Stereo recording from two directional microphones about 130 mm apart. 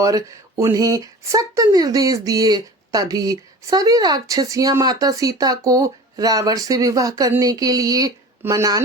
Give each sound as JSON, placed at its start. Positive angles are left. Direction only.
{"t": 0.0, "sound": "speech", "side_deg": -25}